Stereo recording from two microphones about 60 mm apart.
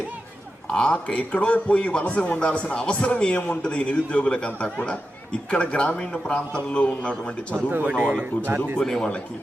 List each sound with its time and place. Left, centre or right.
0.7 s a man's voice: centre
7.5 s speech: right
8.4 s a man's voice: right
8.8 s a man's voice: centre